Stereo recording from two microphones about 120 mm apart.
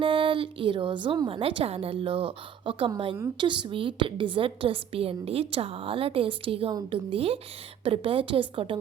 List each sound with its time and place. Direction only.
0.0 s a woman's voice: 45° right (ahead or behind)